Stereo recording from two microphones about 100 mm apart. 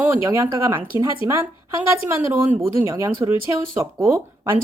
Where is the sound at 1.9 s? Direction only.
30° right (ahead or behind).